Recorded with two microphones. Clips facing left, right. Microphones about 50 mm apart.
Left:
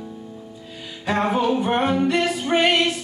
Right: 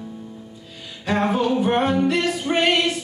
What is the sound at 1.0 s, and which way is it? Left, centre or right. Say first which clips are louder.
Music: even; centre.